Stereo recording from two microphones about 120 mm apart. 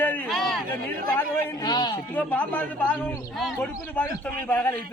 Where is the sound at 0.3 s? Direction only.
Centre (ahead or behind).